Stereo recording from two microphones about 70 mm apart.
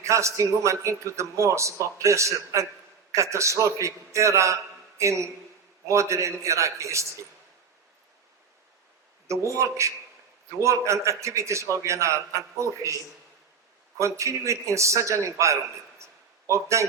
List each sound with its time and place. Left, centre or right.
0.0 s a man's voice: right
9.2 s a man's voice: right
14.0 s a man's voice: right